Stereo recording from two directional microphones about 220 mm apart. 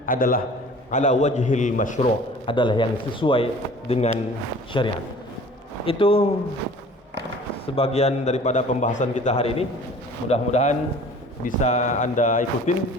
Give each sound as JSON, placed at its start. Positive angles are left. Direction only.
{"t": 0.0, "sound": "a man's voice", "side_deg": 40}
{"t": 2.5, "sound": "speech", "side_deg": 20}
{"t": 7.8, "sound": "a man's voice", "side_deg": 30}